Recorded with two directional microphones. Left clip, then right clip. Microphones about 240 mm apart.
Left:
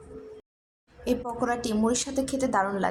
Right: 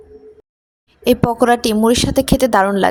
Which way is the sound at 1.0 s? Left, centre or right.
Right.